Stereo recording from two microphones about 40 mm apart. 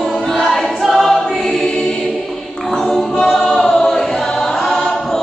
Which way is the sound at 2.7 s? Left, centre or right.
Centre.